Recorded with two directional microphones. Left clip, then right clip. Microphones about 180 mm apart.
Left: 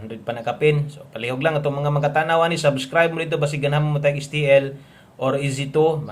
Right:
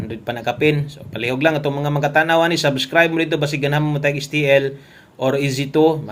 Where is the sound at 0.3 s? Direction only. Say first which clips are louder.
Right 1 dB; 20° right (ahead or behind).